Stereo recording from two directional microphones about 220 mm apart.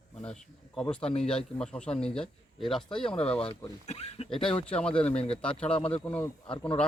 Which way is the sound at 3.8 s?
30° left (ahead or behind).